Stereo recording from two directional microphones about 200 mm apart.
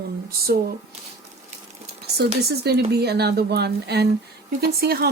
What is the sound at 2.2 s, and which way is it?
Speech, 55° right (ahead or behind).